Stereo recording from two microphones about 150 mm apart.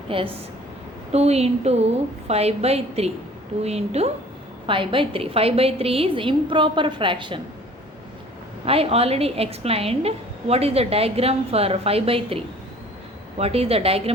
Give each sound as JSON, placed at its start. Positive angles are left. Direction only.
{"t": 0.1, "sound": "a woman's voice", "side_deg": -35}
{"t": 8.6, "sound": "a woman's voice", "side_deg": -40}
{"t": 13.4, "sound": "a woman's voice", "side_deg": -40}